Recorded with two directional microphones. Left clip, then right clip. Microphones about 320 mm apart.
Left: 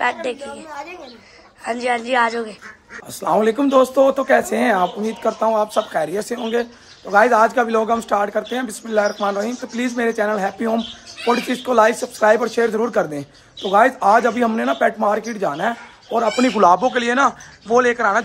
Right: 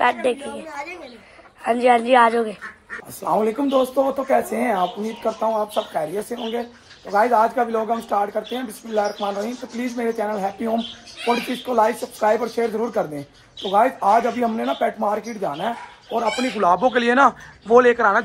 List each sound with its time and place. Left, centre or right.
0.0 s a man's voice: centre
3.3 s speech: centre
3.7 s speech: left
5.2 s speech: left
16.5 s a man's voice: centre